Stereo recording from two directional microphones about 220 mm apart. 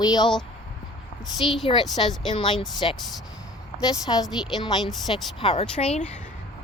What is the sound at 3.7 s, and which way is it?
Speech, 5° right (ahead or behind).